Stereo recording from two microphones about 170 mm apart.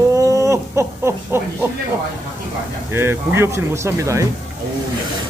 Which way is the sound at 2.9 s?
15° right (ahead or behind).